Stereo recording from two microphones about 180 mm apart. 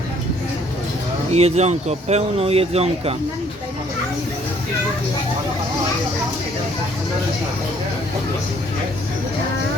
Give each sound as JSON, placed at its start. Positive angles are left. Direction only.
{"t": 1.3, "sound": "speech", "side_deg": -35}